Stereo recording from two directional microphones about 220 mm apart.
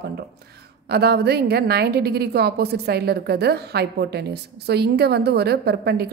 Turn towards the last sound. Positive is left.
turn(degrees=-45)  # may be behind; listen again after turning